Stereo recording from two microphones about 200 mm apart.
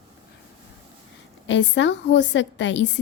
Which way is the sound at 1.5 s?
65° left (ahead or behind).